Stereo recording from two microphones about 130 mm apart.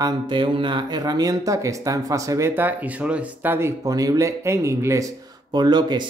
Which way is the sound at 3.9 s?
30° right (ahead or behind).